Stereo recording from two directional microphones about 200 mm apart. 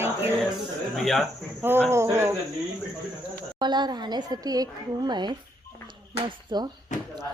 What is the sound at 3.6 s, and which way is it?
A woman's voice, 20° right (ahead or behind).